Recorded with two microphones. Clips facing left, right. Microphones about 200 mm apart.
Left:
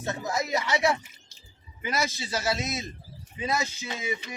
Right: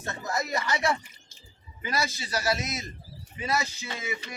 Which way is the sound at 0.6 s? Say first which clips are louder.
Left 2 dB; 15° left (ahead or behind).